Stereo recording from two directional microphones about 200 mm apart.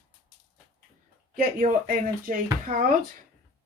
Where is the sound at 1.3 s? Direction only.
45° right (ahead or behind).